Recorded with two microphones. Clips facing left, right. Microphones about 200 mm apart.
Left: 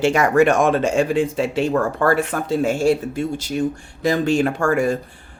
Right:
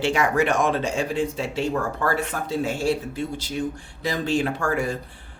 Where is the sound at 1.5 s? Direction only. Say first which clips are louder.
Left 5 dB; 65° left (ahead or behind); by 2.9 s 50° left (ahead or behind).